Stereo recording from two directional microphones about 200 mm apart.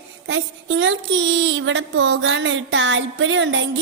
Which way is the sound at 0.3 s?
65° right (ahead or behind).